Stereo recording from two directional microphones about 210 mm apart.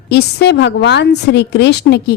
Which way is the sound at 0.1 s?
55° left (ahead or behind).